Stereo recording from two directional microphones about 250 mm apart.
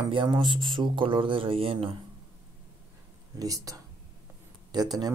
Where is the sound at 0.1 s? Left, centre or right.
Centre.